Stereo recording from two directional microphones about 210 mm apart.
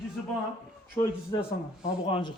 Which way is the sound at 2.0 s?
25° left (ahead or behind).